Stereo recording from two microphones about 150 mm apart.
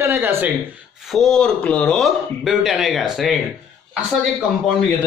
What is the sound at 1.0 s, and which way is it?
Speech, centre (ahead or behind).